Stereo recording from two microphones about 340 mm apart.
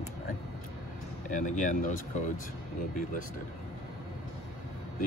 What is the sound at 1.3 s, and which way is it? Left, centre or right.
Speech, left.